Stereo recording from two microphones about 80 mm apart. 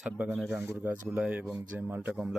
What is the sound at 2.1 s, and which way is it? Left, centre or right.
Speech, centre.